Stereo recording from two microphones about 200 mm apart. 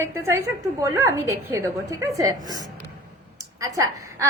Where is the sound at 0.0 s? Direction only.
15° right (ahead or behind).